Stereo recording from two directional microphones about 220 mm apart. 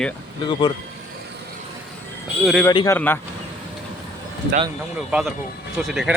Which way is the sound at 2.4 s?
Centre (ahead or behind).